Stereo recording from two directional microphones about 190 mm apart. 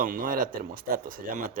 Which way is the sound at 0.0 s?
45° right (ahead or behind).